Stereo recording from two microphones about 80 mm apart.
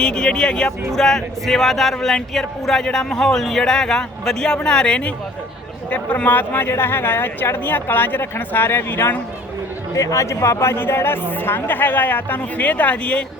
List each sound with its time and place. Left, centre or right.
0.0 s a woman's voice: centre; by 9.1 s left
9.9 s a woman's voice: left; by 13.2 s centre